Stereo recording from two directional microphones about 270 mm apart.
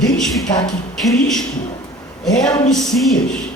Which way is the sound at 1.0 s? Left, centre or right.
Centre.